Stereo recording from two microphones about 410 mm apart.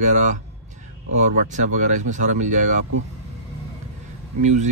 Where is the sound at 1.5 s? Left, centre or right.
Centre.